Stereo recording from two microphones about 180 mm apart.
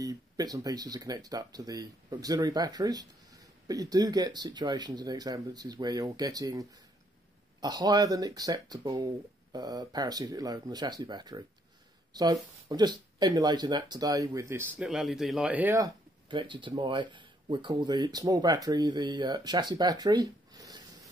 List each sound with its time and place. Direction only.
0.0 s speech: 20° right (ahead or behind)